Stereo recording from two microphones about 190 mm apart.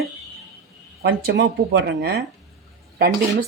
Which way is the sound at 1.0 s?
70° right (ahead or behind).